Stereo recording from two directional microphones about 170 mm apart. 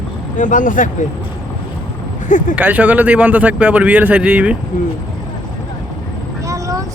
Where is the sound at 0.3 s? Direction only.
50° left (ahead or behind).